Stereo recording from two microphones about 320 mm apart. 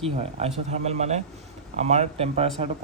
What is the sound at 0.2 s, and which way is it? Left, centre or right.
Speech, centre.